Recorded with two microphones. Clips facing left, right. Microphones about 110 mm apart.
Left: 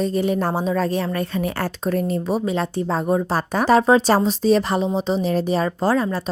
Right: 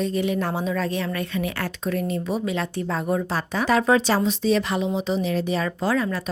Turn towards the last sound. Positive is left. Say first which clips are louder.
# left 4 dB
turn(degrees=35)  # may be behind; listen again after turning